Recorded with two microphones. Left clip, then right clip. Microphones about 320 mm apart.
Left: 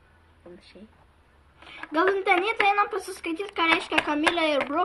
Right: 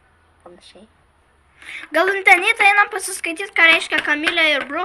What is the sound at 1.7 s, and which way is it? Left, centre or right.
A woman's voice, centre.